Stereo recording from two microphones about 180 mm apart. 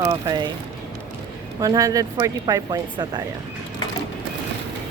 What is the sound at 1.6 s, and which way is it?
Speech, 20° right (ahead or behind).